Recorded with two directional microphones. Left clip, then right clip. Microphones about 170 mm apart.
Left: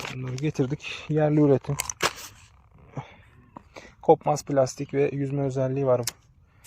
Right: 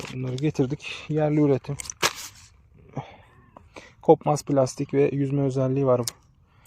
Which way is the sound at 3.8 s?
35° right (ahead or behind).